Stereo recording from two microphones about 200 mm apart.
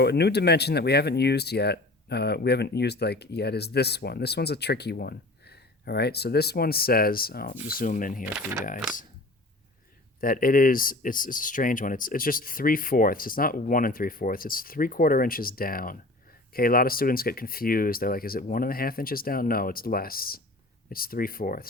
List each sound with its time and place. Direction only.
0.0 s speech: 55° left (ahead or behind)
8.2 s speech: 5° right (ahead or behind)
10.2 s speech: 45° left (ahead or behind)